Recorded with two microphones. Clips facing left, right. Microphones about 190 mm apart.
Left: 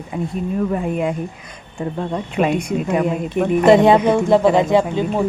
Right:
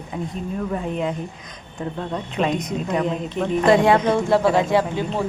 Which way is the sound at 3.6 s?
25° left (ahead or behind).